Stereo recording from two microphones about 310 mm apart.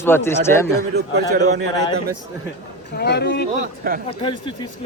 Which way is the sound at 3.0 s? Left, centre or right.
Left.